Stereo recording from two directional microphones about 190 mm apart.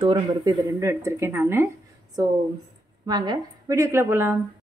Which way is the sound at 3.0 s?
20° right (ahead or behind).